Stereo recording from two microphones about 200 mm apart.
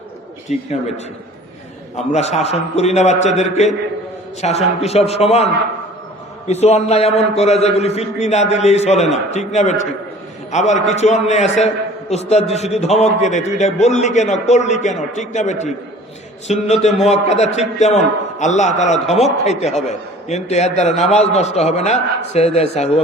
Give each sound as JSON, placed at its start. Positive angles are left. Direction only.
{"t": 0.4, "sound": "a man's voice", "side_deg": 35}
{"t": 2.1, "sound": "a man's voice", "side_deg": 30}
{"t": 6.5, "sound": "a man's voice", "side_deg": 35}